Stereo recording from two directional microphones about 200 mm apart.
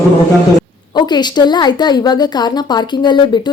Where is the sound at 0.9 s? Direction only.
20° left (ahead or behind).